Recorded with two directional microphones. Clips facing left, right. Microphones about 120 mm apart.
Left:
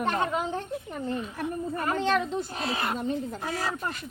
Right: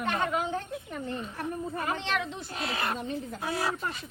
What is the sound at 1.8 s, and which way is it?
Speech, 45° left (ahead or behind).